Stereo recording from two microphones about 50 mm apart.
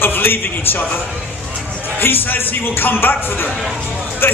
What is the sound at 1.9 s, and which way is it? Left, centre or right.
A man's voice, left.